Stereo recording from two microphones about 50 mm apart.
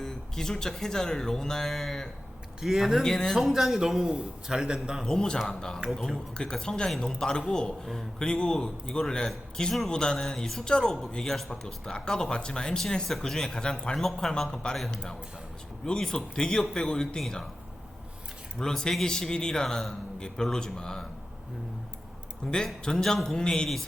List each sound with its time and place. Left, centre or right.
0.0 s a man's voice: centre
2.6 s speech: centre
3.0 s a man's voice: centre
3.3 s a man's voice: centre
5.0 s a man's voice: centre
5.9 s speech: centre
6.3 s a man's voice: centre
15.9 s a man's voice: centre
18.6 s a man's voice: centre
22.4 s a man's voice: centre